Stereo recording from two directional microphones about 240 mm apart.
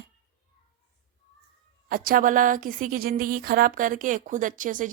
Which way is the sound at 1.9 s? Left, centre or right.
Right.